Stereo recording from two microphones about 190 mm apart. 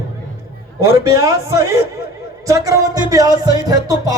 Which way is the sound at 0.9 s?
15° right (ahead or behind).